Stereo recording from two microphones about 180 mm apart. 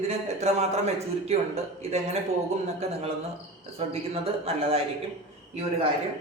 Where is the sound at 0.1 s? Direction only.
35° right (ahead or behind).